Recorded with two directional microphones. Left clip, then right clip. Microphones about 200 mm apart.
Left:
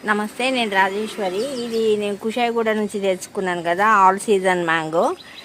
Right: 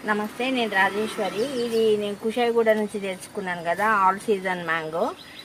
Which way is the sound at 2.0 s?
55° left (ahead or behind).